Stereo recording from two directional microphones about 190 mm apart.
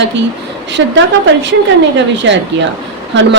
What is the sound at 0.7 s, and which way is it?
A woman's voice, 70° right (ahead or behind).